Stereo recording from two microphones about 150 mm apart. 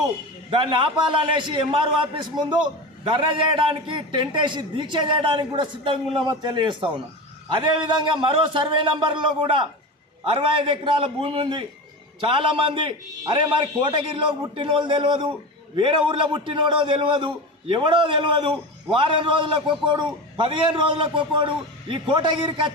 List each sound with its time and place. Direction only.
0.5 s a man's voice: 35° right (ahead or behind)